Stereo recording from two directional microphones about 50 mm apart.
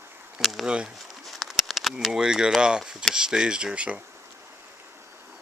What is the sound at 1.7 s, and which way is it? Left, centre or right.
Speech, centre.